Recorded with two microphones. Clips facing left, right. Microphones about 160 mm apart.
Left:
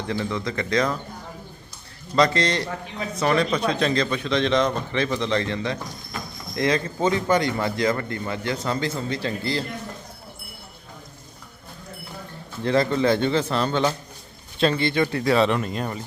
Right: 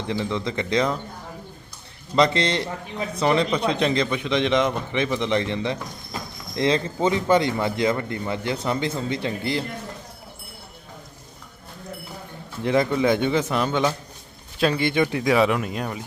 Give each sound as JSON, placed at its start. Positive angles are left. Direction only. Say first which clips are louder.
{"t": 0.1, "sound": "speech", "louder": "right 1 dB", "side_deg": -20}
{"t": 2.1, "sound": "speech", "louder": "even", "side_deg": -25}
{"t": 12.6, "sound": "speech", "louder": "even", "side_deg": -15}